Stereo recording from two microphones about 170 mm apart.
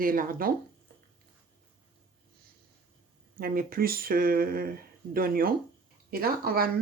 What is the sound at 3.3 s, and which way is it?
Speech, 60° right (ahead or behind).